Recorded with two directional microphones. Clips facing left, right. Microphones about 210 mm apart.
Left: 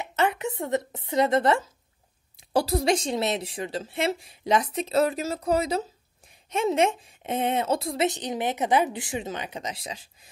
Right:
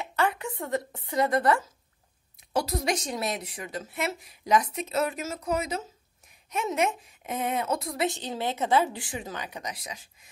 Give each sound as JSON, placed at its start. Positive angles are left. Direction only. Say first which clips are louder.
{"t": 0.0, "sound": "a woman's voice", "louder": "left 2 dB", "side_deg": 20}